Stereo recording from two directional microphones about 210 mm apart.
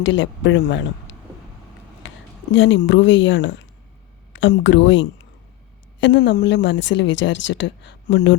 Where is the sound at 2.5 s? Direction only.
65° left (ahead or behind).